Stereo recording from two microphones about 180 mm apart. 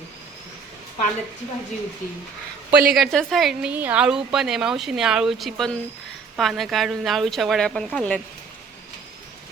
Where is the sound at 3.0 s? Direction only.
Centre (ahead or behind).